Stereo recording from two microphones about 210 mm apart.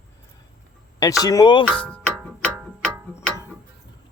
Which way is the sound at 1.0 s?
15° left (ahead or behind).